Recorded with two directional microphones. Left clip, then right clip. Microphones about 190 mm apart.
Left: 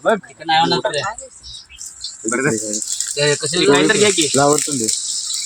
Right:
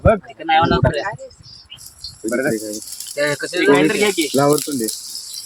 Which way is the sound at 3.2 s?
Centre (ahead or behind).